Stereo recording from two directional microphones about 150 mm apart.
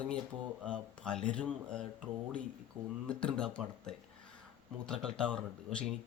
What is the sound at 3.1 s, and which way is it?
Speech, 5° left (ahead or behind).